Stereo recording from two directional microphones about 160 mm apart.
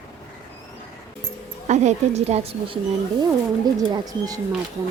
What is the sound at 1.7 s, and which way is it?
A woman's voice, 45° right (ahead or behind).